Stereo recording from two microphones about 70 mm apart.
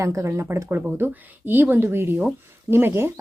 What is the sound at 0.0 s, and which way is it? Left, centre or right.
Speech, right.